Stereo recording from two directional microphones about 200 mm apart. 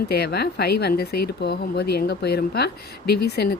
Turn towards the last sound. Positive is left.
turn(degrees=55)  # may be behind; listen again after turning